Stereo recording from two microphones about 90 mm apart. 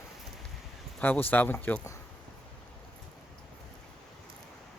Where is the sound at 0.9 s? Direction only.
20° left (ahead or behind).